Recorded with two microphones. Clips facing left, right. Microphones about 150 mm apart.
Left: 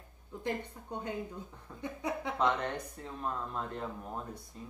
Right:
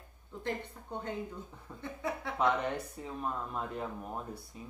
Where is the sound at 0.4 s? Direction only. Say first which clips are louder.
Left 1 dB; 15° left (ahead or behind).